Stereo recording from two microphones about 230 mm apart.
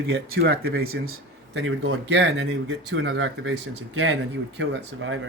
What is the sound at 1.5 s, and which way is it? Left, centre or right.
Speech, right.